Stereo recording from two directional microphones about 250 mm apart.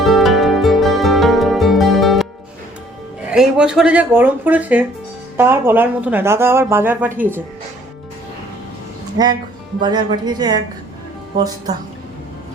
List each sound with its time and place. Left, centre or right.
0.0 s music: centre
3.2 s a woman's voice: centre
9.8 s a woman's voice: centre